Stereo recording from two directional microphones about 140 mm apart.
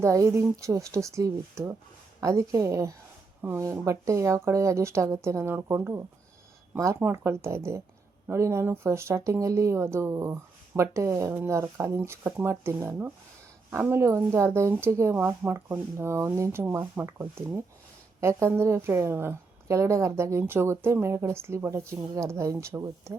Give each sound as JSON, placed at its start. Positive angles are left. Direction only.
{"t": 0.0, "sound": "a woman's voice", "side_deg": -20}